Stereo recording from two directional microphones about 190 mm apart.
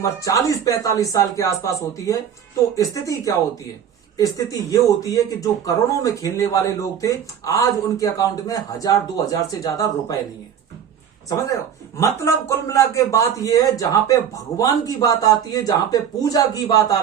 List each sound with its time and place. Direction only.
0.3 s speech: 15° left (ahead or behind)
11.9 s speech: 15° left (ahead or behind)